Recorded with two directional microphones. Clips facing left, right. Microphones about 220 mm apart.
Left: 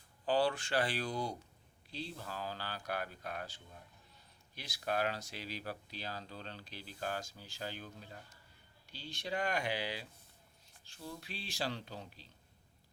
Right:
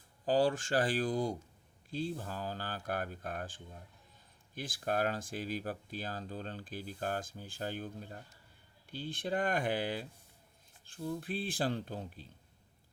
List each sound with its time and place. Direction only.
0.3 s speech: 45° right (ahead or behind)